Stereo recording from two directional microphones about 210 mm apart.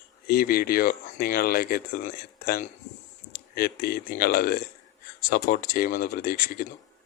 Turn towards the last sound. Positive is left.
turn(degrees=45)  # may be behind; listen again after turning